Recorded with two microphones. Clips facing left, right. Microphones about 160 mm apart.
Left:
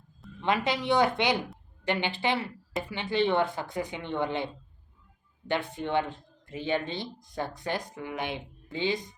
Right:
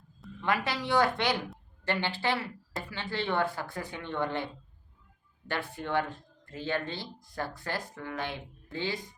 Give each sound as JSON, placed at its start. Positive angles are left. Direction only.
{"t": 0.4, "sound": "speech", "side_deg": 20}